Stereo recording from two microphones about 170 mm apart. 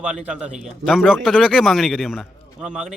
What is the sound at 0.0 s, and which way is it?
Speech, 5° right (ahead or behind).